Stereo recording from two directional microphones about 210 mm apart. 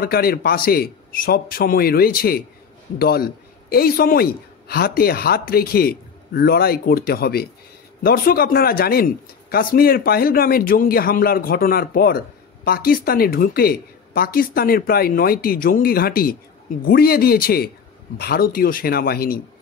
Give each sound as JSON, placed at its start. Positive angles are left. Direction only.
{"t": 0.0, "sound": "speech", "side_deg": 45}